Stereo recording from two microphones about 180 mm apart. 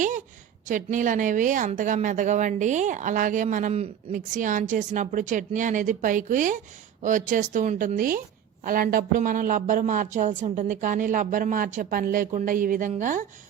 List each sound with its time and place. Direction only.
0.7 s a woman's voice: 45° right (ahead or behind)